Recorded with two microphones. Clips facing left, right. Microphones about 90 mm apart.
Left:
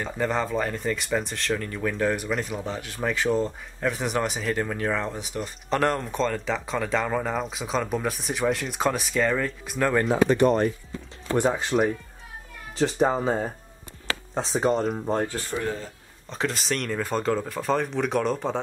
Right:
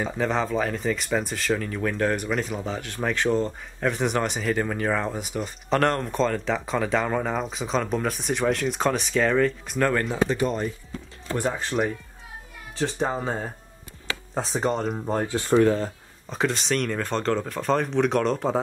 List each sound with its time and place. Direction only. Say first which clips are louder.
0.0 s speech: right 1 dB; centre (ahead or behind)
10.3 s speech: left 5 dB; 55° left (ahead or behind)
11.5 s speech: left 2 dB; centre (ahead or behind)
14.3 s speech: left 2 dB; centre (ahead or behind)
15.5 s speech: right 13 dB; 75° right (ahead or behind)
16.3 s speech: right 3 dB; centre (ahead or behind)